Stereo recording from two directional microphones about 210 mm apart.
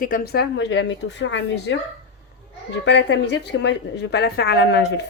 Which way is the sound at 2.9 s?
55° left (ahead or behind).